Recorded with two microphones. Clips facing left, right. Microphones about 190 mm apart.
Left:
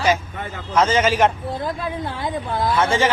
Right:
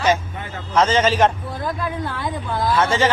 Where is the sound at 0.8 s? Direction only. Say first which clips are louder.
Right 1 dB; 10° left (ahead or behind).